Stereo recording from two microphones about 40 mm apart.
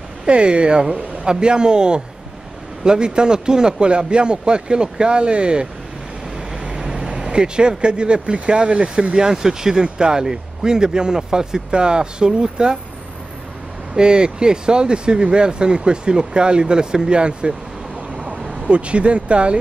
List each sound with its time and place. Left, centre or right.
0.3 s speech: right
13.9 s speech: right
18.1 s a sound: right
18.7 s speech: right